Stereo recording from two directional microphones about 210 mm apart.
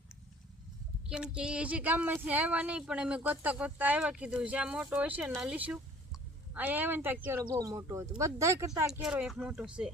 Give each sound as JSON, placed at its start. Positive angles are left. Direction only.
{"t": 1.1, "sound": "speech", "side_deg": -5}
{"t": 8.9, "sound": "speech", "side_deg": -5}